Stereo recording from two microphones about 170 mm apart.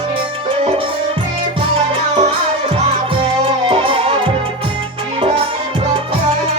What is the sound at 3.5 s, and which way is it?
Music, 30° right (ahead or behind).